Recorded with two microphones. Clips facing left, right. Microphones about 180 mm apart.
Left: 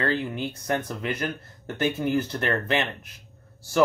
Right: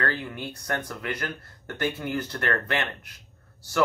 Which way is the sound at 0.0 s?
20° left (ahead or behind).